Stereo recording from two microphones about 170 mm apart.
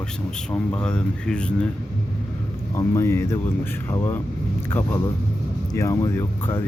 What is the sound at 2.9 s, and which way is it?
Speech, 15° left (ahead or behind).